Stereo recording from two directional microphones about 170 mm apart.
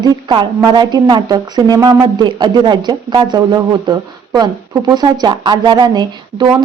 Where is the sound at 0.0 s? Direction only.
25° right (ahead or behind).